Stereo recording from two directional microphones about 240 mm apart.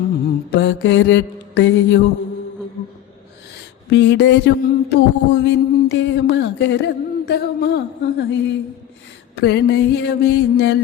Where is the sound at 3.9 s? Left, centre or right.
Left.